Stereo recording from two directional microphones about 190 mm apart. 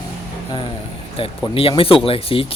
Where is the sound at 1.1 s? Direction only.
30° left (ahead or behind).